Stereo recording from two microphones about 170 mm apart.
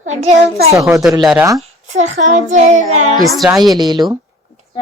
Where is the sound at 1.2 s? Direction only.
5° right (ahead or behind).